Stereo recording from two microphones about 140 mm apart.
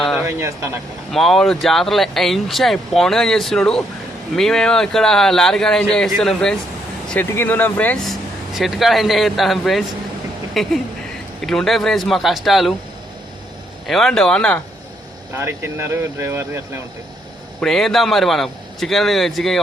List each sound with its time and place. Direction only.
0.2 s speech: 20° right (ahead or behind)
1.1 s speech: centre (ahead or behind)
8.5 s speech: centre (ahead or behind)
13.8 s speech: centre (ahead or behind)
15.4 s speech: 20° right (ahead or behind)
17.6 s speech: 5° left (ahead or behind)